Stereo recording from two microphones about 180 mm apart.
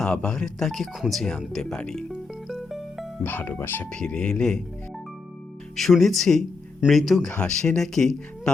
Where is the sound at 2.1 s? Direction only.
Centre (ahead or behind).